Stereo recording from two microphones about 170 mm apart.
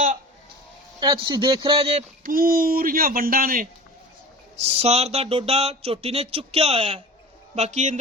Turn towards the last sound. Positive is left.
turn(degrees=-40)  # may be behind; listen again after turning